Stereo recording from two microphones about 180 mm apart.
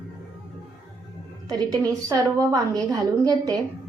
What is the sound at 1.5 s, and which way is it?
A woman's voice, 20° right (ahead or behind).